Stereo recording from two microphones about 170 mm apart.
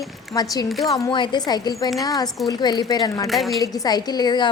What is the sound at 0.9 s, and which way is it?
A woman's voice, 25° left (ahead or behind).